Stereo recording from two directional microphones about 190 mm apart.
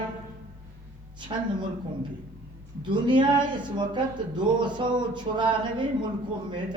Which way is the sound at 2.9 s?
25° right (ahead or behind).